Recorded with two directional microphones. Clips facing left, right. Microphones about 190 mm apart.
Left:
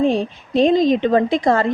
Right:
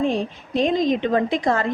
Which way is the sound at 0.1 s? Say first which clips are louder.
Left 4 dB; 30° left (ahead or behind).